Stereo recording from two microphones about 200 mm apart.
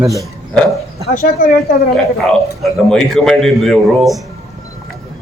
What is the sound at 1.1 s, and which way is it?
Speech, 40° left (ahead or behind).